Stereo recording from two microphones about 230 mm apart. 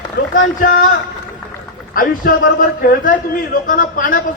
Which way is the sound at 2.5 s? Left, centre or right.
Left.